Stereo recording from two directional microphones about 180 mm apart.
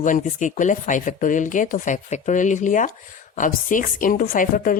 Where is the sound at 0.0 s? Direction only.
45° left (ahead or behind).